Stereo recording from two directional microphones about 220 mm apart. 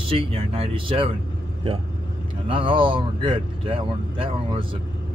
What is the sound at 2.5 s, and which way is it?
Speech, 25° right (ahead or behind).